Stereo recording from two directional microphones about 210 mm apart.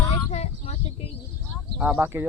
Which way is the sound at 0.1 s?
30° left (ahead or behind).